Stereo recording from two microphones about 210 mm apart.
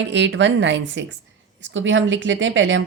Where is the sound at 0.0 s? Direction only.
55° right (ahead or behind).